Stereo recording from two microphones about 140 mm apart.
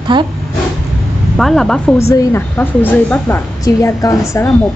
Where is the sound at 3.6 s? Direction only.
25° left (ahead or behind).